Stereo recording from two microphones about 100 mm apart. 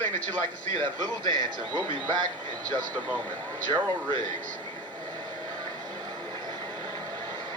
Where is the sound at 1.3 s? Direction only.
45° right (ahead or behind).